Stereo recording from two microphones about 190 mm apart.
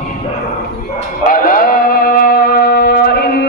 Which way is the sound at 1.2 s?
45° left (ahead or behind).